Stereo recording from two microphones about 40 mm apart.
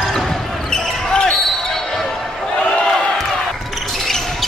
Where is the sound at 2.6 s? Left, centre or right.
Left.